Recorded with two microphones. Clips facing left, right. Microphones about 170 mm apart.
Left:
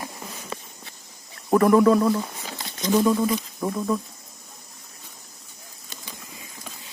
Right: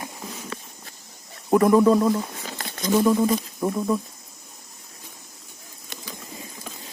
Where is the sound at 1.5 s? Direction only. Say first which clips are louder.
Even; 15° right (ahead or behind).